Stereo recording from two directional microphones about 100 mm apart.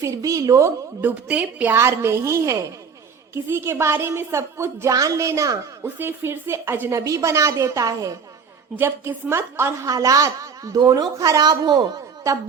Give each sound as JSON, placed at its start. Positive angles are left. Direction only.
{"t": 0.0, "sound": "a woman's voice", "side_deg": -35}
{"t": 1.0, "sound": "a woman's voice", "side_deg": -15}
{"t": 1.7, "sound": "a woman's voice", "side_deg": -25}
{"t": 6.0, "sound": "a woman's voice", "side_deg": -20}
{"t": 7.0, "sound": "a woman's voice", "side_deg": -30}
{"t": 8.7, "sound": "a woman's voice", "side_deg": -25}